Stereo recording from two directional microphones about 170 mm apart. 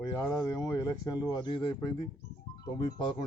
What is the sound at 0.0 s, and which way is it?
Speech, 20° left (ahead or behind).